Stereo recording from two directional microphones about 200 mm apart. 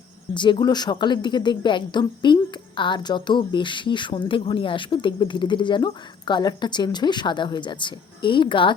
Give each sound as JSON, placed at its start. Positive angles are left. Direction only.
{"t": 0.3, "sound": "speech", "side_deg": 20}